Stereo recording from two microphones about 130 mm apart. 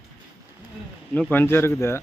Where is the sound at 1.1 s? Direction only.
15° left (ahead or behind).